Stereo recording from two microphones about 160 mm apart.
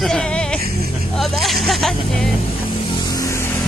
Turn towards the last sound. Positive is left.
turn(degrees=20)  # may be behind; listen again after turning